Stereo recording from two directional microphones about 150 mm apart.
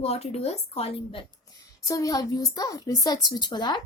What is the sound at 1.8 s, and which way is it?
A woman's voice, 20° left (ahead or behind).